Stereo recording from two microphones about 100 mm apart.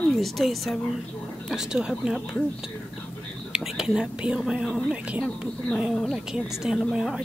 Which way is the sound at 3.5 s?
5° right (ahead or behind).